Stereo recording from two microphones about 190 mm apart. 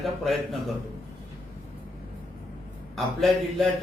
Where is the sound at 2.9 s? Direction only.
Centre (ahead or behind).